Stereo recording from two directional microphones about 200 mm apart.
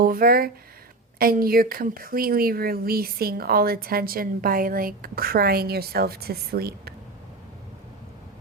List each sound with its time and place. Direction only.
0.0 s a woman's voice: 45° right (ahead or behind)